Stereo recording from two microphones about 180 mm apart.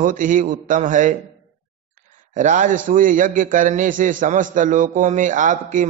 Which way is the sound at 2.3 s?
45° right (ahead or behind).